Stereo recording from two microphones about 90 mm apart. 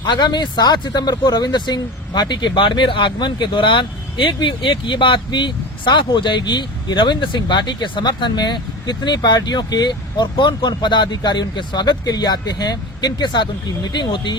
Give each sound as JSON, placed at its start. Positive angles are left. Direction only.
{"t": 0.0, "sound": "speech", "side_deg": 55}